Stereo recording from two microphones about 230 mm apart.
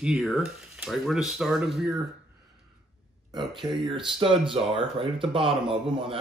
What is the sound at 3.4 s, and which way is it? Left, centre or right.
Speech, centre.